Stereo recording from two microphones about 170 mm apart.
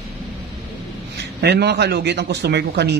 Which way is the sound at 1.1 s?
75° right (ahead or behind).